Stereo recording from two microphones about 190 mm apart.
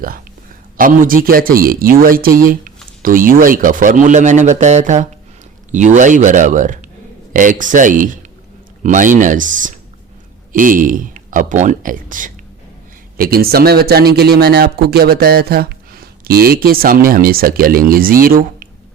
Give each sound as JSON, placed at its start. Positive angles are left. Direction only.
{"t": 0.8, "sound": "speech", "side_deg": -45}